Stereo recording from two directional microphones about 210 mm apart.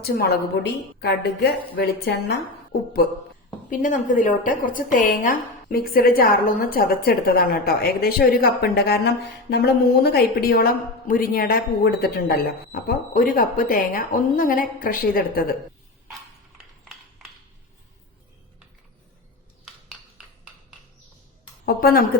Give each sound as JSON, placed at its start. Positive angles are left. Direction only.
{"t": 0.0, "sound": "a woman's voice", "side_deg": 50}
{"t": 3.7, "sound": "a woman's voice", "side_deg": 40}
{"t": 19.6, "sound": "a sound", "side_deg": 0}
{"t": 21.7, "sound": "a woman's voice", "side_deg": 45}